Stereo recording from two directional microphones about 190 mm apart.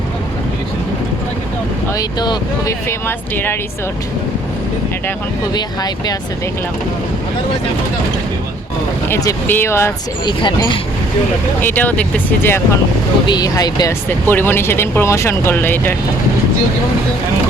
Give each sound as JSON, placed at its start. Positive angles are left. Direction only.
{"t": 1.9, "sound": "speech", "side_deg": 20}
{"t": 5.5, "sound": "speech", "side_deg": 20}
{"t": 9.0, "sound": "speech", "side_deg": 15}
{"t": 10.4, "sound": "speech", "side_deg": 25}
{"t": 11.6, "sound": "speech", "side_deg": 10}